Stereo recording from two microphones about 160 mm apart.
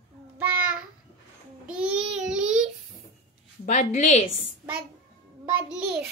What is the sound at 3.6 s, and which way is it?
Speech, 50° left (ahead or behind).